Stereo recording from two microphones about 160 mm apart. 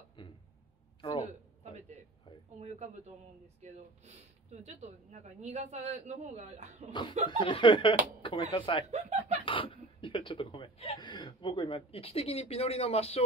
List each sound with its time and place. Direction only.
0.2 s a sound: 30° left (ahead or behind)
2.6 s a sound: 45° right (ahead or behind)
3.6 s speech: 45° right (ahead or behind)
6.9 s speech: 30° left (ahead or behind)
8.9 s chicken: 45° right (ahead or behind)
9.4 s speech: 35° left (ahead or behind)